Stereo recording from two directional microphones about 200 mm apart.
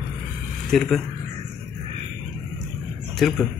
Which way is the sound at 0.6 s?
Centre (ahead or behind).